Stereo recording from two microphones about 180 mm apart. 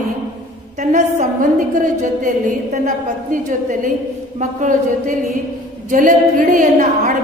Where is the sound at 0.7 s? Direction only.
45° right (ahead or behind).